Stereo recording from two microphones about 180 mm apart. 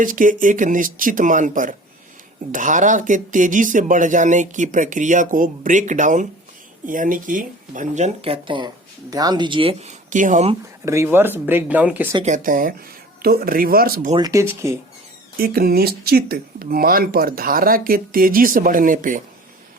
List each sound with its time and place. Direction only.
0.0 s speech: 50° right (ahead or behind); by 9.9 s 30° right (ahead or behind)
10.1 s speech: 45° right (ahead or behind)
10.8 s speech: 15° right (ahead or behind)
12.2 s speech: 45° right (ahead or behind)
14.2 s speech: 20° right (ahead or behind)
15.4 s speech: 55° right (ahead or behind)